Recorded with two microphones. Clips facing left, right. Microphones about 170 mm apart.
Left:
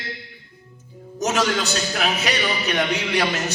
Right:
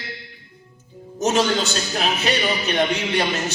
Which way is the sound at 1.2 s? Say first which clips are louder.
Right 2 dB; 30° right (ahead or behind).